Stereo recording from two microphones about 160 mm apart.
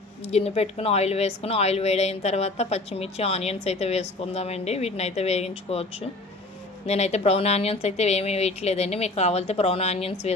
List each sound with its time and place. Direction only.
0.3 s speech: 40° left (ahead or behind)